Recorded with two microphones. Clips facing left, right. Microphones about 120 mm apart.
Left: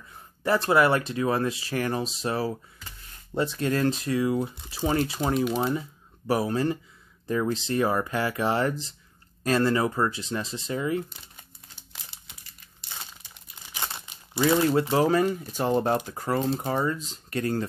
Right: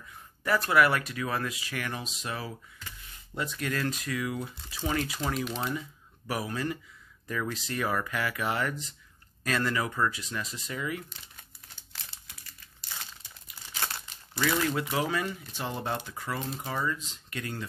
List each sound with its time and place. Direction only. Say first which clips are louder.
0.4 s speech: left 3 dB; 25° left (ahead or behind)
11.9 s crumpling: left 1 dB; 15° left (ahead or behind)
13.7 s speech: left 1 dB; 15° left (ahead or behind); by 17.6 s 40° left (ahead or behind)